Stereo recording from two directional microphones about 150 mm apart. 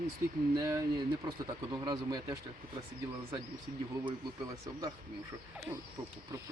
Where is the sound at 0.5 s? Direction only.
25° right (ahead or behind).